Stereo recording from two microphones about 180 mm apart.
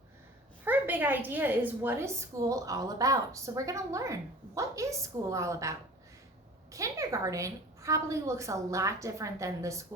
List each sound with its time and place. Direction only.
0.6 s a woman's voice: 10° right (ahead or behind)